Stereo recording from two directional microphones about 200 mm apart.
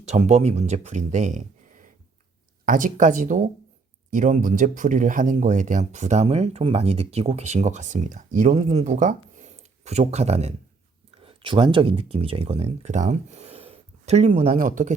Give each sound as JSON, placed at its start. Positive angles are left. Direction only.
{"t": 0.1, "sound": "speech", "side_deg": -35}